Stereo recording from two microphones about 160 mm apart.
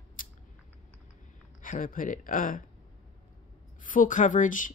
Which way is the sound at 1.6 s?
60° left (ahead or behind).